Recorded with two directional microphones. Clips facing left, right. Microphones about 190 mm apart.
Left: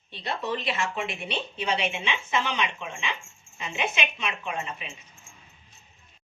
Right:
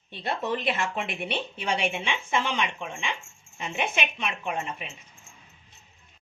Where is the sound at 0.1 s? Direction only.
50° right (ahead or behind).